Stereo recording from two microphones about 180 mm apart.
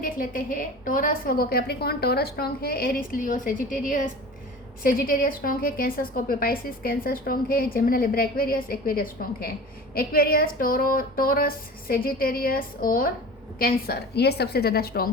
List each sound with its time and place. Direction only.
0.0 s a woman's voice: 50° left (ahead or behind)